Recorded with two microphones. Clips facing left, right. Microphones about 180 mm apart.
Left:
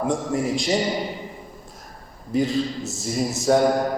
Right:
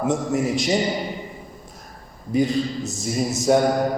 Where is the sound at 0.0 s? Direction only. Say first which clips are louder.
Right 2 dB; 20° right (ahead or behind).